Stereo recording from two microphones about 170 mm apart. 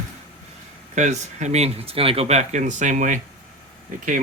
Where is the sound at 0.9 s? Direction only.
45° right (ahead or behind).